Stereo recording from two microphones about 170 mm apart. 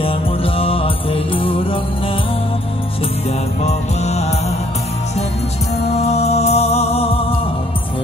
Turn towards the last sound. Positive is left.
turn(degrees=35)  # may be behind; listen again after turning